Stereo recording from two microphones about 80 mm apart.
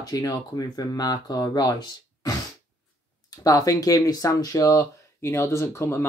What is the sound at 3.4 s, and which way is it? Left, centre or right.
Speech, left.